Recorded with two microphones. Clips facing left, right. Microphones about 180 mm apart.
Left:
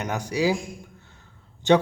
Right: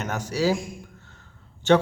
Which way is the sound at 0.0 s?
15° left (ahead or behind).